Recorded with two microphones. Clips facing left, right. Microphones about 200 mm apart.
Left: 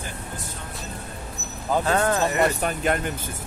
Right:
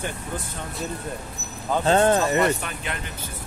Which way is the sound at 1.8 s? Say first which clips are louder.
Right 6 dB; 25° right (ahead or behind).